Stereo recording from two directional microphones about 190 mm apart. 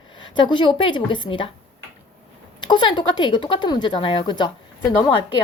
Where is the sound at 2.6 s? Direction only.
25° left (ahead or behind).